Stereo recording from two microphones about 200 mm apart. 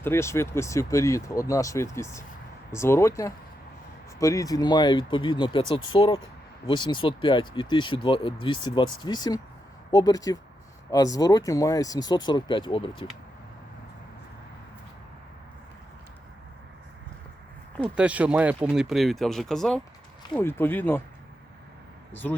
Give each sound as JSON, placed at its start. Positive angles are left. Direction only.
{"t": 0.0, "sound": "speech", "side_deg": 15}
{"t": 17.7, "sound": "speech", "side_deg": -5}
{"t": 22.1, "sound": "speech", "side_deg": 10}